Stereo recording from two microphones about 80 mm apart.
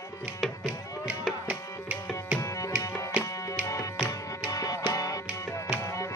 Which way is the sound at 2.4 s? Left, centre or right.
Left.